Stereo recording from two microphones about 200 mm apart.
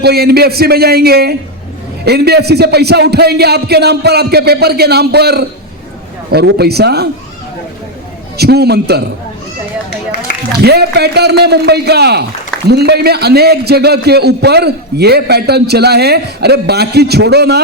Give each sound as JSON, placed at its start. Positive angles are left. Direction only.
{"t": 0.0, "sound": "a man's voice", "side_deg": -50}
{"t": 8.4, "sound": "a man's voice", "side_deg": -55}
{"t": 10.6, "sound": "a man's voice", "side_deg": -55}